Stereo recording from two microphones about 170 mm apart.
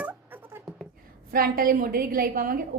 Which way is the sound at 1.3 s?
60° right (ahead or behind).